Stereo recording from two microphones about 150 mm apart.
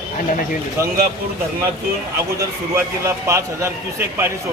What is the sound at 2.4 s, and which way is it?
A man's voice, 20° right (ahead or behind).